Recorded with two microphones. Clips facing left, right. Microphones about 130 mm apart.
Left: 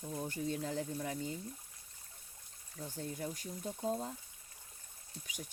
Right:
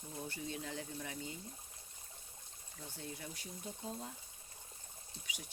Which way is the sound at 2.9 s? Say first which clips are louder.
Left 7 dB; 45° left (ahead or behind).